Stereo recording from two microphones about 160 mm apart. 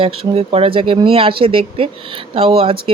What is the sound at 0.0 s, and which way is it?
Speech, 35° right (ahead or behind).